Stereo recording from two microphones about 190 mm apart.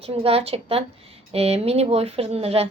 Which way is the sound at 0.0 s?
30° right (ahead or behind).